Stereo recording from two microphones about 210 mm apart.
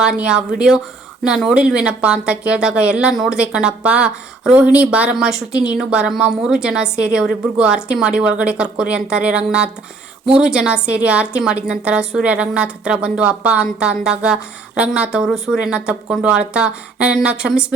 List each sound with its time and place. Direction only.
0.0 s speech: 5° right (ahead or behind)